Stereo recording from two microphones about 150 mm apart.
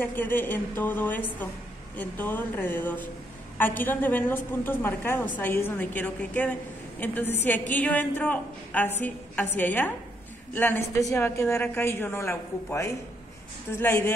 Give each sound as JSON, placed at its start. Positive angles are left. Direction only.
{"t": 0.0, "sound": "a woman's voice", "side_deg": 15}